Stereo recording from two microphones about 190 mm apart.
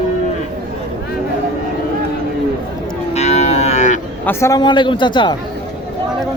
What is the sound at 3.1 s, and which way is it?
Livestock, 35° left (ahead or behind).